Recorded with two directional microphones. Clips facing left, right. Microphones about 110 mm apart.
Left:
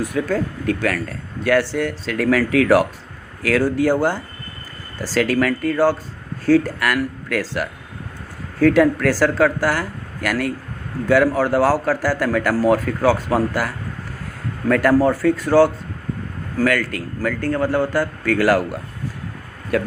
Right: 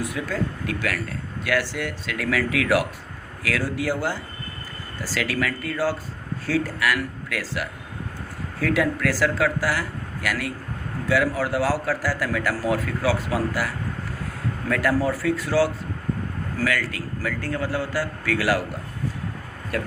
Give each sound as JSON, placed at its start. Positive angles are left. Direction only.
{"t": 0.0, "sound": "a man's voice", "side_deg": 50}
{"t": 14.7, "sound": "a man's voice", "side_deg": 50}